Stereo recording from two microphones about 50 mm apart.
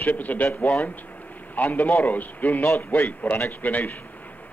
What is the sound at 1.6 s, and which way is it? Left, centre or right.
A man's voice, left.